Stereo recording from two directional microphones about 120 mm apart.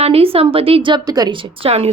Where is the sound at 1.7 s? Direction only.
60° right (ahead or behind).